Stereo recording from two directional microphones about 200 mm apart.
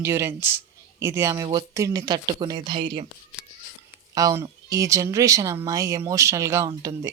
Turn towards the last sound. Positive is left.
turn(degrees=-15)  # may be behind; listen again after turning